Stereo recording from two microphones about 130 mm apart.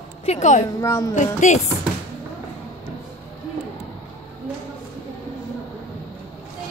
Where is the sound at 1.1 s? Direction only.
70° left (ahead or behind).